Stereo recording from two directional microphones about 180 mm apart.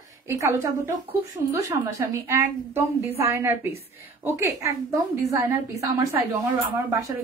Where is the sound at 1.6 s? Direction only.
15° right (ahead or behind).